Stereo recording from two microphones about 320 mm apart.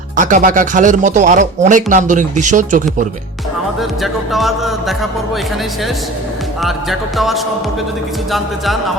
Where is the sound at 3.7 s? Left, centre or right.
Centre.